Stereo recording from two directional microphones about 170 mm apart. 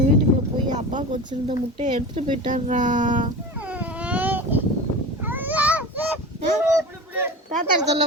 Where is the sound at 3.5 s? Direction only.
10° right (ahead or behind).